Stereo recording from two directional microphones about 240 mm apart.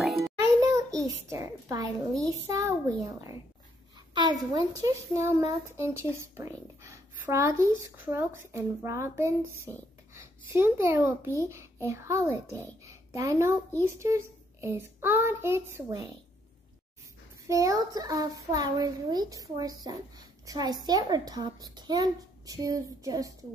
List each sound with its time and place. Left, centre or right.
0.2 s music: centre
1.3 s a child's voice: centre
17.5 s a child's voice: centre